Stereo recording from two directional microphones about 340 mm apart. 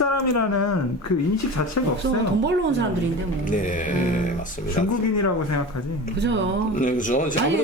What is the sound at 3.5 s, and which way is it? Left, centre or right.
Speech, left.